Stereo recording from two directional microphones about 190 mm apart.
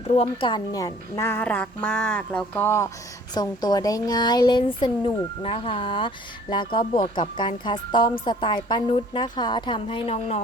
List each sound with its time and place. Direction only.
0.1 s a child's voice: 30° left (ahead or behind)